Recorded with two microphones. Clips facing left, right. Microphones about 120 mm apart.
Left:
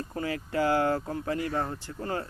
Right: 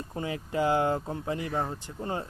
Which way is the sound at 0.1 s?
20° right (ahead or behind).